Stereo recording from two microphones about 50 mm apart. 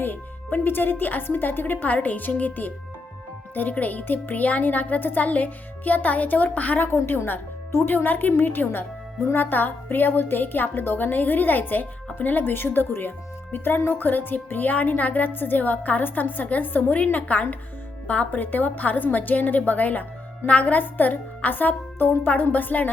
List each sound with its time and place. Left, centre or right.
0.0 s speech: left